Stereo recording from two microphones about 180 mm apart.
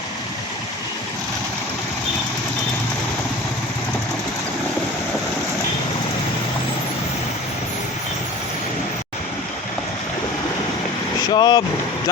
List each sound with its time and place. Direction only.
11.3 s speech: 25° left (ahead or behind)